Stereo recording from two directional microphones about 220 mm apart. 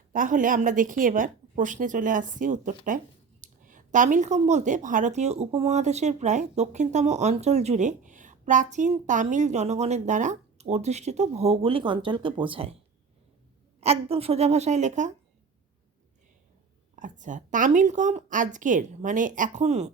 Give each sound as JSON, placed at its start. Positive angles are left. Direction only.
{"t": 0.1, "sound": "a woman's voice", "side_deg": -35}
{"t": 13.8, "sound": "a woman's voice", "side_deg": -25}
{"t": 16.9, "sound": "a woman's voice", "side_deg": -35}